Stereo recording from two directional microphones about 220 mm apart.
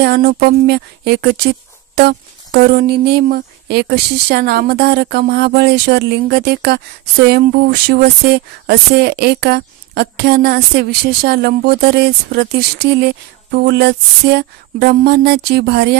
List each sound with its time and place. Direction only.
0.0 s speech: 45° right (ahead or behind)
7.9 s speech: 45° right (ahead or behind)